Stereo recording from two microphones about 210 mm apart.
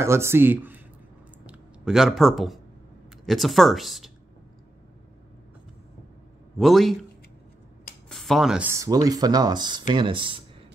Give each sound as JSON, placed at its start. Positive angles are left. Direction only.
{"t": 0.0, "sound": "speech", "side_deg": -10}
{"t": 1.4, "sound": "a sound", "side_deg": -5}
{"t": 3.3, "sound": "speech", "side_deg": 0}
{"t": 6.6, "sound": "speech", "side_deg": 0}
{"t": 8.1, "sound": "speech", "side_deg": 0}